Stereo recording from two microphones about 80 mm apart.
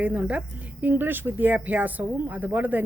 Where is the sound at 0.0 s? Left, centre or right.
Centre.